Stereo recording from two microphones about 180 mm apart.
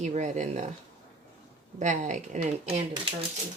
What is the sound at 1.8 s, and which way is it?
Speech, 45° right (ahead or behind).